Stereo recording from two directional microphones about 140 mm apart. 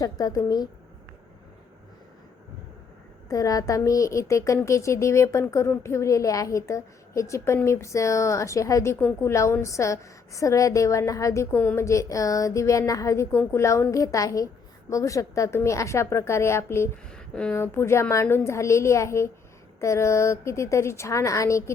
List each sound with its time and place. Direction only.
0.0 s a woman's voice: 25° left (ahead or behind)
3.2 s a woman's voice: 25° left (ahead or behind)
17.1 s a sound: 5° left (ahead or behind)
17.6 s a woman's voice: 20° left (ahead or behind)